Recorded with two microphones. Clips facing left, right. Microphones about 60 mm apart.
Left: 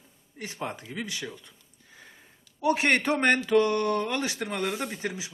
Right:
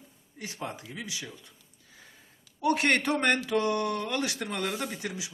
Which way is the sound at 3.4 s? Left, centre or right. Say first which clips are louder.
Left 4 dB; left.